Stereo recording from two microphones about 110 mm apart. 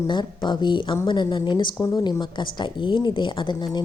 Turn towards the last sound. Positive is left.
turn(degrees=40)  # may be behind; listen again after turning